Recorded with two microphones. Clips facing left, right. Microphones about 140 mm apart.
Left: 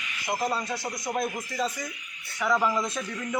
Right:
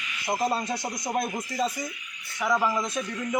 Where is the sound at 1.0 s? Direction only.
35° right (ahead or behind).